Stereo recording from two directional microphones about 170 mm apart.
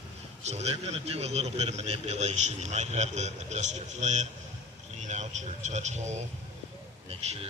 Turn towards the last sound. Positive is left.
turn(degrees=-35)  # may be behind; listen again after turning